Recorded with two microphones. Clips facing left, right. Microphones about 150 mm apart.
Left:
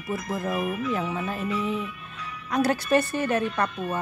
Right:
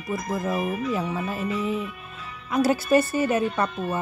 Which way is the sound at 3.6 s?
30° right (ahead or behind).